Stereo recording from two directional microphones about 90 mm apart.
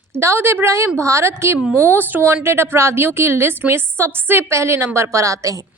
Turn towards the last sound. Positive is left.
turn(degrees=-35)  # may be behind; listen again after turning